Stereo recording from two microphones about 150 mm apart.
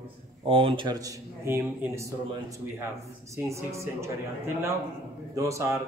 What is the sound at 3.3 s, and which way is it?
Speech, 20° right (ahead or behind).